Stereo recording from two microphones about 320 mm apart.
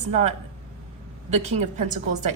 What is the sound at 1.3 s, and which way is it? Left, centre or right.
Speech, right.